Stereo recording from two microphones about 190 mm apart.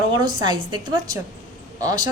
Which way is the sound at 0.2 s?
20° right (ahead or behind).